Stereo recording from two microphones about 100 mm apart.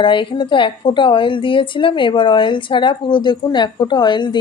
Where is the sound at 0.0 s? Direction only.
55° left (ahead or behind).